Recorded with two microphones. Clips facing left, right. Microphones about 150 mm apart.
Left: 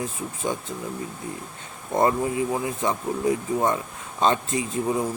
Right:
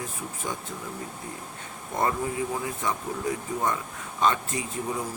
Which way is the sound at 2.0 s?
20° left (ahead or behind).